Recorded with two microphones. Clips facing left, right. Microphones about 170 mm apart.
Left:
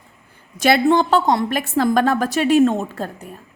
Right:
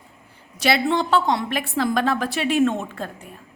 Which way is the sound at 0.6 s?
45° left (ahead or behind).